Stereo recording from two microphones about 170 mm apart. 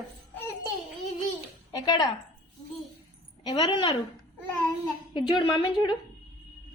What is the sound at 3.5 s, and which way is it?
Speech, 25° left (ahead or behind).